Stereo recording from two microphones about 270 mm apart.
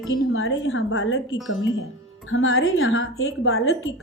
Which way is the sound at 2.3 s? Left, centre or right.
Left.